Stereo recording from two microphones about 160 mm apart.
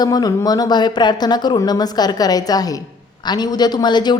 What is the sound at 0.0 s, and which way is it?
A woman's voice, 25° left (ahead or behind).